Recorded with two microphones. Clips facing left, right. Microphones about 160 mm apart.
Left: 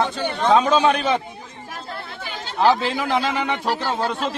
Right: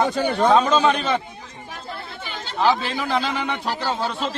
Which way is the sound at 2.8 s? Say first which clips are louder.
Left 2 dB; 20° left (ahead or behind).